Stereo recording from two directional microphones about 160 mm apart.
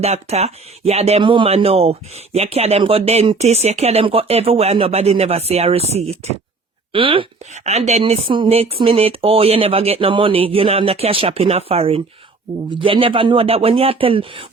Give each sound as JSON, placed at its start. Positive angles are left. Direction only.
{"t": 0.0, "sound": "speech", "side_deg": -40}
{"t": 7.5, "sound": "speech", "side_deg": -45}